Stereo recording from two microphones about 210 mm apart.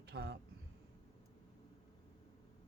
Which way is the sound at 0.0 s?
50° right (ahead or behind).